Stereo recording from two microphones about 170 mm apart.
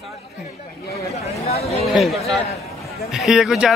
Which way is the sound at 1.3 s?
40° left (ahead or behind).